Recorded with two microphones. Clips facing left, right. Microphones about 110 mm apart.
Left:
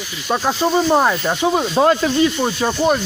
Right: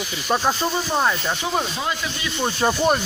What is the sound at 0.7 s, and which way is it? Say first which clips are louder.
Speech: left 7 dB; 25° left (ahead or behind).